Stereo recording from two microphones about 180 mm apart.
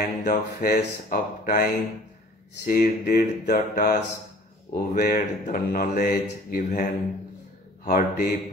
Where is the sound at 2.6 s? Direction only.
55° left (ahead or behind).